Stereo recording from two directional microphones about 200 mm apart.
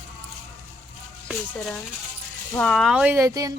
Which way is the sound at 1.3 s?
5° left (ahead or behind).